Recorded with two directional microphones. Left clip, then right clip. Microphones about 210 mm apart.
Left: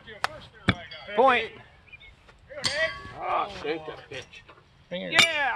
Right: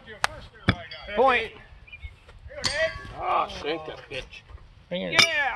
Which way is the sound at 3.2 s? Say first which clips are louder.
Right 3 dB; 45° right (ahead or behind).